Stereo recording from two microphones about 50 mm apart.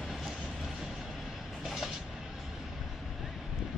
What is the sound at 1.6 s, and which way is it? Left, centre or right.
Train, centre.